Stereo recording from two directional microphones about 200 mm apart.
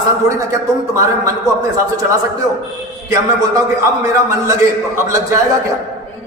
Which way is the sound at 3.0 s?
15° right (ahead or behind).